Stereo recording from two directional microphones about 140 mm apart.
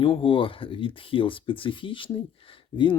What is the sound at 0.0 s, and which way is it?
Speech, 40° left (ahead or behind).